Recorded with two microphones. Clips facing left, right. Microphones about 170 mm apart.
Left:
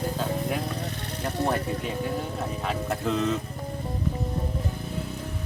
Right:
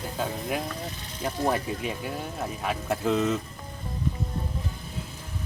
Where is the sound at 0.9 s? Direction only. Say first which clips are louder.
Left 7 dB; 65° left (ahead or behind).